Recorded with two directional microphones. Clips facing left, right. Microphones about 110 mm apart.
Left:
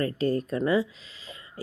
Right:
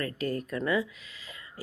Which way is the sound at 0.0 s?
30° left (ahead or behind).